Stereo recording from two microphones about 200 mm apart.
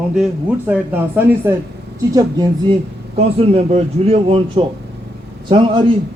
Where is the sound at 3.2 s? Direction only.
30° right (ahead or behind).